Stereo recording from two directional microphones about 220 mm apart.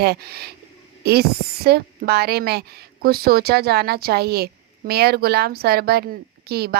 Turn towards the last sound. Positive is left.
turn(degrees=-45)  # may be behind; listen again after turning